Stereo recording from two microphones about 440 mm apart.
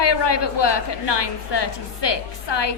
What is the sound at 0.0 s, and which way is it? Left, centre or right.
A woman's voice, left.